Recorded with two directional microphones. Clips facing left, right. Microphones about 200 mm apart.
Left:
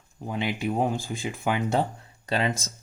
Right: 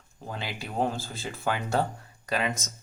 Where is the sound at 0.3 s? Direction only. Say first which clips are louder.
Left 8 dB; 20° left (ahead or behind).